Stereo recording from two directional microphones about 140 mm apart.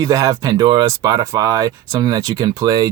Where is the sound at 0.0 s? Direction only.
25° right (ahead or behind).